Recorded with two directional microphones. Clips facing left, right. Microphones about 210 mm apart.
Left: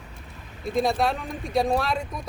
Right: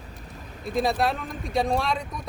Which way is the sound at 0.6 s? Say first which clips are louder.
Left 1 dB; centre (ahead or behind).